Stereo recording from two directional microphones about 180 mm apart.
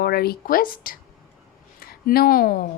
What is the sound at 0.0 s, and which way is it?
A woman's voice, 60° left (ahead or behind).